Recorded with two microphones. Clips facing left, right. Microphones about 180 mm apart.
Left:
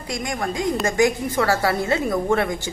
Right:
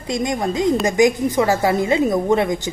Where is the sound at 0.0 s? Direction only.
20° right (ahead or behind).